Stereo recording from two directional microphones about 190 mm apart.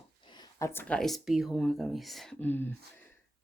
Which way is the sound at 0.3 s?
15° left (ahead or behind).